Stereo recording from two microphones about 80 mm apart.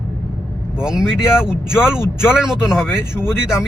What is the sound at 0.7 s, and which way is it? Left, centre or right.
Speech, centre.